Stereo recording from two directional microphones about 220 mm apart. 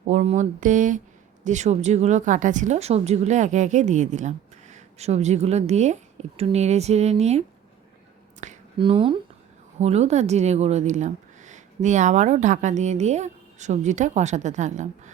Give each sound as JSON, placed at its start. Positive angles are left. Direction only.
{"t": 0.1, "sound": "a woman's voice", "side_deg": -30}
{"t": 8.4, "sound": "a sound", "side_deg": -30}
{"t": 9.7, "sound": "a woman's voice", "side_deg": -30}